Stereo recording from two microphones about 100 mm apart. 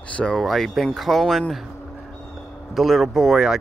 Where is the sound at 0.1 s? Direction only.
10° left (ahead or behind).